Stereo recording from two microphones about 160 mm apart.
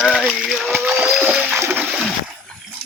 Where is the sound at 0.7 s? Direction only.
10° right (ahead or behind).